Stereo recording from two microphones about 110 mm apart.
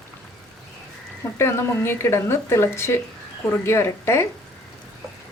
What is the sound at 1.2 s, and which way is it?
Speech, 25° left (ahead or behind).